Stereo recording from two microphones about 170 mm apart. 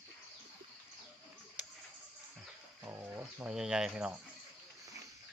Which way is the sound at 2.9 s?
10° right (ahead or behind).